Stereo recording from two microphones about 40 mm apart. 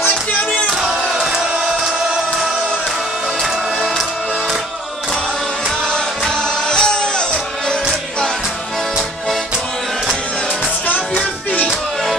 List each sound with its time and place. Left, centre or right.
6.7 s music: centre